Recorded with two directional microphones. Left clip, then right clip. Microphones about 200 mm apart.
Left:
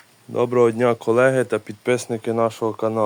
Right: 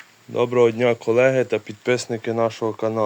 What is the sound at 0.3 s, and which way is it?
Speech, 5° left (ahead or behind).